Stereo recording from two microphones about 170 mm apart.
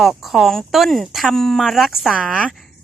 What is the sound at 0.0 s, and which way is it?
Speech, centre (ahead or behind).